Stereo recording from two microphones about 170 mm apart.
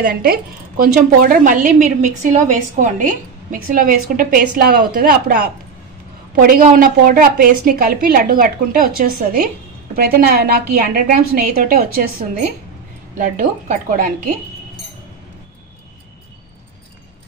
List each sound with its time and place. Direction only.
0.0 s a woman's voice: 60° right (ahead or behind); by 3.1 s 45° right (ahead or behind)
3.5 s a woman's voice: 55° right (ahead or behind)